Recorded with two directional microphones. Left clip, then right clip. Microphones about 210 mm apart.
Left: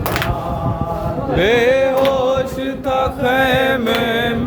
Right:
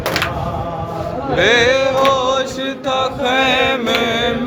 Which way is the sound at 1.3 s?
35° left (ahead or behind).